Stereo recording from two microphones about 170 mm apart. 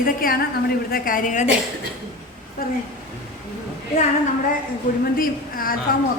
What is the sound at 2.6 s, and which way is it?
Speech, 60° left (ahead or behind).